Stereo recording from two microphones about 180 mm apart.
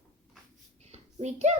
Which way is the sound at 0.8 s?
35° right (ahead or behind).